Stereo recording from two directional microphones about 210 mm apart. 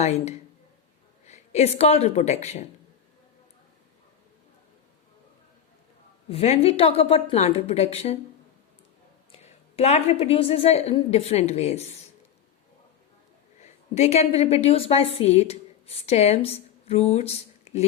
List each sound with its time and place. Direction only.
0.0 s speech: 30° left (ahead or behind)
6.2 s a woman's voice: 30° left (ahead or behind)
9.3 s a woman's voice: 30° left (ahead or behind)
13.6 s a woman's voice: 30° left (ahead or behind)